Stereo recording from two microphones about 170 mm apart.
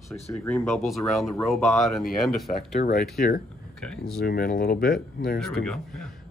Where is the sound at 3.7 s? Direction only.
5° left (ahead or behind).